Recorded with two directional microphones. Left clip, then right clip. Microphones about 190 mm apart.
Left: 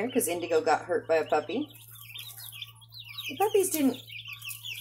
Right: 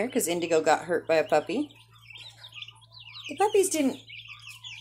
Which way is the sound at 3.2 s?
30° right (ahead or behind).